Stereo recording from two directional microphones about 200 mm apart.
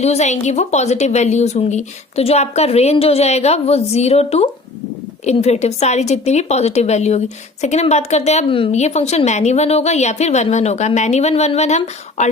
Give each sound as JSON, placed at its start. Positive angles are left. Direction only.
{"t": 0.0, "sound": "a woman's voice", "side_deg": 35}